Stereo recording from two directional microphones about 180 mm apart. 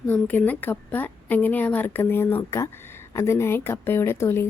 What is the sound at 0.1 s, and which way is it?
A woman's voice, 10° left (ahead or behind).